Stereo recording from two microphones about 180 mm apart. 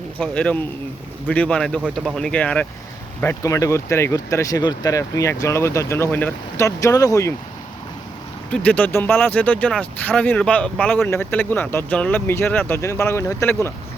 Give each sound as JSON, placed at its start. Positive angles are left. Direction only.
{"t": 0.2, "sound": "speech", "side_deg": 10}
{"t": 8.5, "sound": "speech", "side_deg": 10}